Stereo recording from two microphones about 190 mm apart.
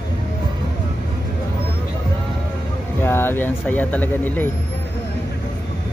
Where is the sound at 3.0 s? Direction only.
10° left (ahead or behind).